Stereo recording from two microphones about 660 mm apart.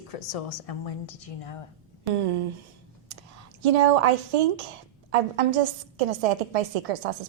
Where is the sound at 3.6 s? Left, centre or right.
Right.